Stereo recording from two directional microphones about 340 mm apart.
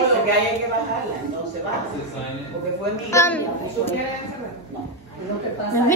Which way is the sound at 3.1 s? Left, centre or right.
Centre.